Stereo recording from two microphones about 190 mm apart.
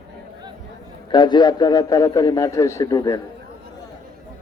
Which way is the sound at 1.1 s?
25° left (ahead or behind).